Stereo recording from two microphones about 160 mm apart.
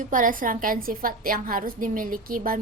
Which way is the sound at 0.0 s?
55° right (ahead or behind).